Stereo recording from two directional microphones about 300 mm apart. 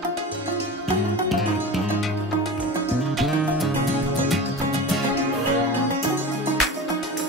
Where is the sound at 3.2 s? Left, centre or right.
Centre.